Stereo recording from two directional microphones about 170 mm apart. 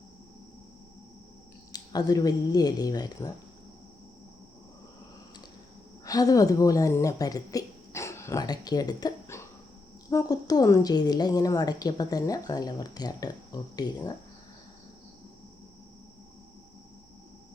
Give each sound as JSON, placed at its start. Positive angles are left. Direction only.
{"t": 1.7, "sound": "a woman's voice", "side_deg": 20}
{"t": 6.1, "sound": "a woman's voice", "side_deg": 20}